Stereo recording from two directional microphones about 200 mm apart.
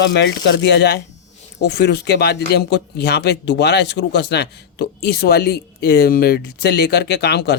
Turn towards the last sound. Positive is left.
turn(degrees=55)  # may be behind; listen again after turning